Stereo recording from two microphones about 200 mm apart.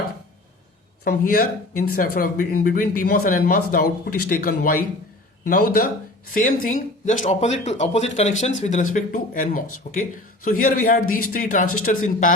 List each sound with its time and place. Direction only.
1.0 s speech: 45° left (ahead or behind)